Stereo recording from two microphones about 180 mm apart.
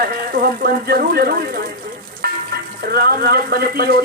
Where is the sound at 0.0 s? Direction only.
55° right (ahead or behind).